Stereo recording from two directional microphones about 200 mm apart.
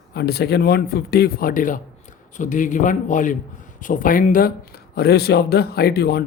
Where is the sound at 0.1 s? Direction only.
55° left (ahead or behind).